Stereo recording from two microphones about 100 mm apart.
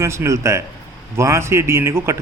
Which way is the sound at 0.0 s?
25° right (ahead or behind).